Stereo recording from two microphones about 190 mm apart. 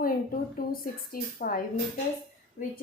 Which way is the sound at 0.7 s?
50° left (ahead or behind).